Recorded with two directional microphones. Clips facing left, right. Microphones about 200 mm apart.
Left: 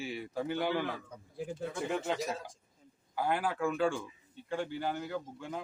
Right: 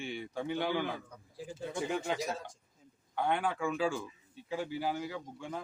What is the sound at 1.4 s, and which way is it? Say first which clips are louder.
Speech: left 5 dB; 60° left (ahead or behind).